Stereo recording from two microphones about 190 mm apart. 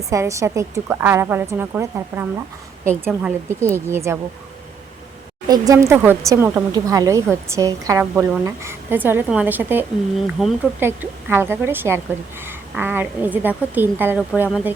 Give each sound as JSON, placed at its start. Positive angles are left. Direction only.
{"t": 0.1, "sound": "a woman's voice", "side_deg": -15}
{"t": 5.5, "sound": "a woman's voice", "side_deg": -15}